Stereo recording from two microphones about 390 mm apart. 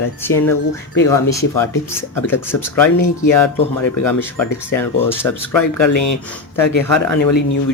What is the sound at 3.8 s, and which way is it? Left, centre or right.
Speech, left.